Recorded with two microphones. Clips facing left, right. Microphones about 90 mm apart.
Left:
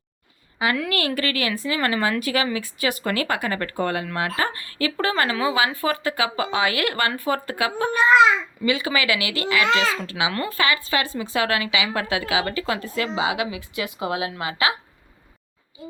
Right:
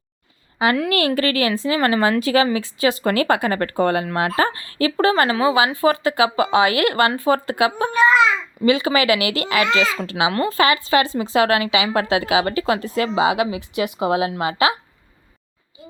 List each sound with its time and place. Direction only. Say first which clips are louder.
0.6 s a woman's voice: right 5 dB; 30° right (ahead or behind)